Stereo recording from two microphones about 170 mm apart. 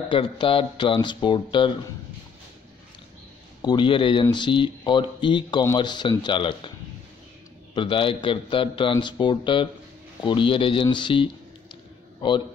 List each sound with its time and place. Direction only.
0.1 s speech: 30° left (ahead or behind)
3.6 s speech: 30° left (ahead or behind)
7.7 s speech: 30° left (ahead or behind)
11.7 s a sound: 30° left (ahead or behind)